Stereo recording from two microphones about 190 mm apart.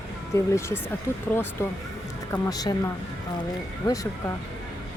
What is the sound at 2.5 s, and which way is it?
Speech, 20° left (ahead or behind).